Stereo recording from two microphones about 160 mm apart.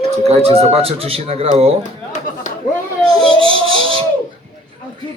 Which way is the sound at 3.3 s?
35° right (ahead or behind).